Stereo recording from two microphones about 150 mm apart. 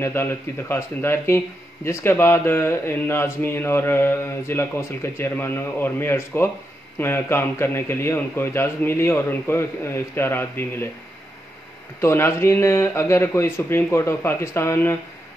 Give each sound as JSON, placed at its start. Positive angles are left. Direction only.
{"t": 0.0, "sound": "speech", "side_deg": 15}
{"t": 12.0, "sound": "speech", "side_deg": 15}